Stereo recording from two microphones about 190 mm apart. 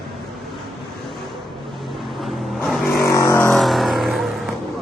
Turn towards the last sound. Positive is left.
turn(degrees=0)  # may be behind; listen again after turning